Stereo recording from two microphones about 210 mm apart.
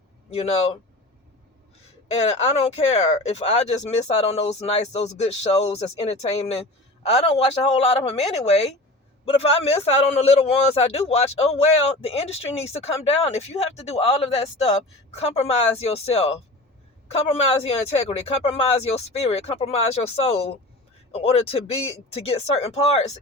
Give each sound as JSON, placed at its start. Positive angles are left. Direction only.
{"t": 0.3, "sound": "a man's voice", "side_deg": 30}
{"t": 2.0, "sound": "a man's voice", "side_deg": 30}